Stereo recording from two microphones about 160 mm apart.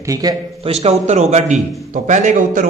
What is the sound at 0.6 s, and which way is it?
A man's voice, 40° right (ahead or behind).